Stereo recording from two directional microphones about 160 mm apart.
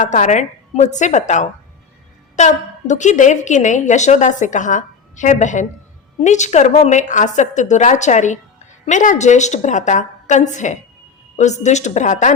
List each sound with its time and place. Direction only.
0.0 s a woman's voice: 50° left (ahead or behind)